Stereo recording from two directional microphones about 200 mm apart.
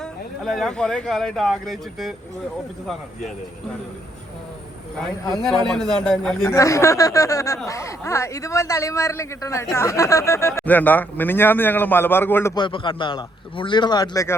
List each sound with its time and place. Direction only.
0.0 s speech: centre (ahead or behind)
5.3 s speech: centre (ahead or behind)
6.4 s speech: 15° left (ahead or behind)
12.5 s a man's voice: 25° left (ahead or behind)